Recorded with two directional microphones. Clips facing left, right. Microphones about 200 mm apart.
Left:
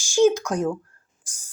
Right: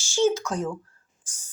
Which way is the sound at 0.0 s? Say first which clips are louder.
Left 5 dB; 15° left (ahead or behind).